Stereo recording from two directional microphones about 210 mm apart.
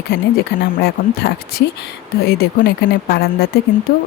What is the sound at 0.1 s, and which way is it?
Speech, 50° left (ahead or behind).